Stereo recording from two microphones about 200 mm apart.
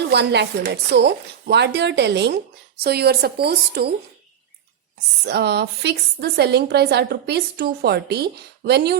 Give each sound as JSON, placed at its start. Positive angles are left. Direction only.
{"t": 0.1, "sound": "a woman's voice", "side_deg": -60}
{"t": 5.2, "sound": "a woman's voice", "side_deg": -55}